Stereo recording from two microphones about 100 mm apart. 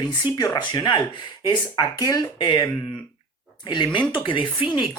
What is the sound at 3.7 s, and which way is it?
Speech, 50° left (ahead or behind).